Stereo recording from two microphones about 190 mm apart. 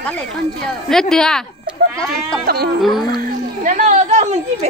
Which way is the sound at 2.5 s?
55° right (ahead or behind).